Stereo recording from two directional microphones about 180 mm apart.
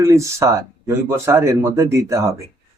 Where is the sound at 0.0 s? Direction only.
15° right (ahead or behind).